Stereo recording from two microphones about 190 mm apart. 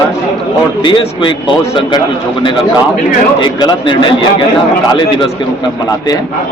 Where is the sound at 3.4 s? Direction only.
25° left (ahead or behind).